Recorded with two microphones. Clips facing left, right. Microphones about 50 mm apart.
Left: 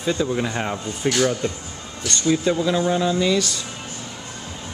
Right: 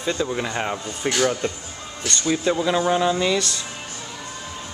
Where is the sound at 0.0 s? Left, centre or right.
Centre.